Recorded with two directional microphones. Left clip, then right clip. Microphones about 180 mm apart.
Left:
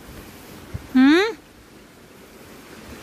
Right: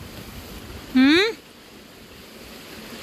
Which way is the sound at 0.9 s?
35° left (ahead or behind).